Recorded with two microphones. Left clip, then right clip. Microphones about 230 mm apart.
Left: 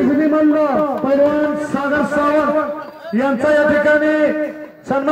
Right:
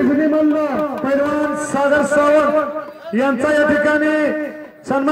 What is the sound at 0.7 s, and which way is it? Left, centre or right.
A man's voice, right.